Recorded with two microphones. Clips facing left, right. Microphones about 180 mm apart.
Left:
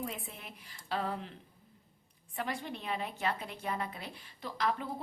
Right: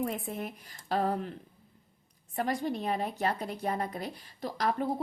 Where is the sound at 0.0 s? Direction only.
50° right (ahead or behind).